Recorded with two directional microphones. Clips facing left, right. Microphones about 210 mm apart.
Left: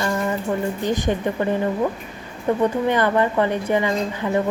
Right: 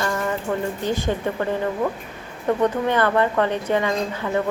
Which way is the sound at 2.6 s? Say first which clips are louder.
Left 1 dB; 15° left (ahead or behind).